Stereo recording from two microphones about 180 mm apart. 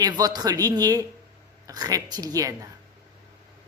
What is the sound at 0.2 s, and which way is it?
Speech, 20° right (ahead or behind).